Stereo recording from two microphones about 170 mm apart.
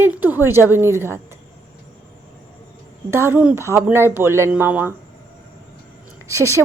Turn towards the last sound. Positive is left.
turn(degrees=-15)  # may be behind; listen again after turning